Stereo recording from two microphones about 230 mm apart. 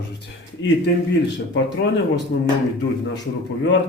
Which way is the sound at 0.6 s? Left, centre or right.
Left.